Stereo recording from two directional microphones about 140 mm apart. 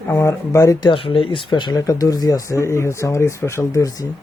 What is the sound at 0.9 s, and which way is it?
Speech, 40° left (ahead or behind).